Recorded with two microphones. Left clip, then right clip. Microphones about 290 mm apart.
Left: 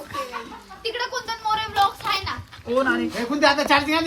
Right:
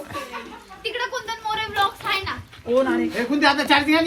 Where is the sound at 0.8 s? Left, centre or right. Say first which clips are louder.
Even; left.